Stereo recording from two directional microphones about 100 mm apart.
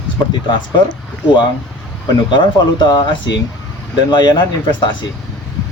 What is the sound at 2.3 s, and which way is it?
Speech, 50° left (ahead or behind).